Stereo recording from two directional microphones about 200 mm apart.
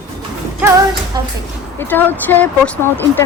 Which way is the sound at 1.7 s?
10° left (ahead or behind).